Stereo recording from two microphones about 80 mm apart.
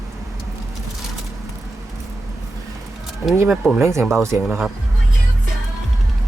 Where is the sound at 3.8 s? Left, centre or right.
Right.